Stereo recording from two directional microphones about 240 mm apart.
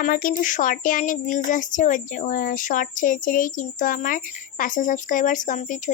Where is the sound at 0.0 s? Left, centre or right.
Left.